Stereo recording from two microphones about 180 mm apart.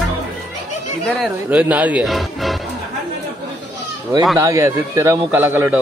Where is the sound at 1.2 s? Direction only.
5° right (ahead or behind).